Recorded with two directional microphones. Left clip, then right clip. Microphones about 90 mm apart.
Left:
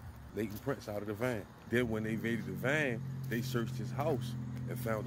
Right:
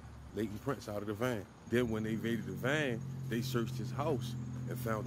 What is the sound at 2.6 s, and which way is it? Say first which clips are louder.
Speech: left 1 dB; 20° right (ahead or behind).